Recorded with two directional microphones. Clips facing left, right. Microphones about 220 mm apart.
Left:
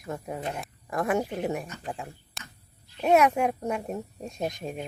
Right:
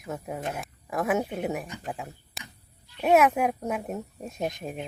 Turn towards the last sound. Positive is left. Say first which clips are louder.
# even
turn(degrees=0)  # may be behind; listen again after turning